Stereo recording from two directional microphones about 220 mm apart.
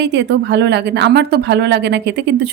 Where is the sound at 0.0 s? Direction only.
50° right (ahead or behind).